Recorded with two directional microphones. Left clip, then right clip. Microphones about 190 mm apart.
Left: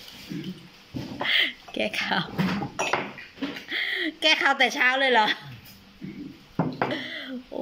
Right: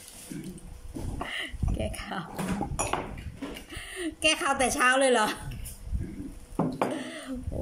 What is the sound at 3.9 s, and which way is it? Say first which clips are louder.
A woman's voice: left 4 dB; 10° right (ahead or behind).